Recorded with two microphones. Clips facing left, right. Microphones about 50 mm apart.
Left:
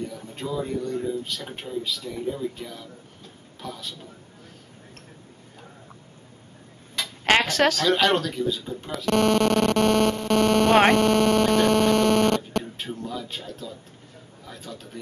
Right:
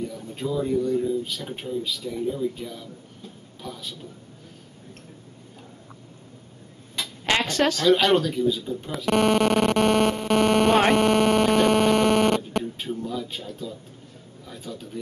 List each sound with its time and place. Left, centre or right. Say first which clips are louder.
0.3 s speech: right 4 dB; centre
7.4 s speech: left 1 dB; left
7.8 s speech: right 2 dB; centre
8.9 s speech: even; centre
10.9 s hum: even; centre
12.7 s speech: right 3 dB; centre